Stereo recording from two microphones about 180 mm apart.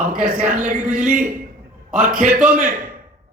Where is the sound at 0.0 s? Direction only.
50° right (ahead or behind).